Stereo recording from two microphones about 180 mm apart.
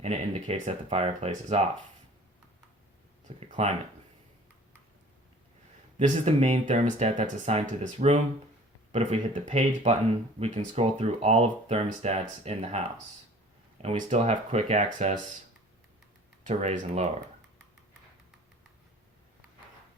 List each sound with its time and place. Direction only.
0.0 s speech: 35° right (ahead or behind)
3.2 s speech: 40° right (ahead or behind)
6.0 s speech: 35° right (ahead or behind)
13.8 s speech: 35° right (ahead or behind)
16.5 s speech: 40° right (ahead or behind)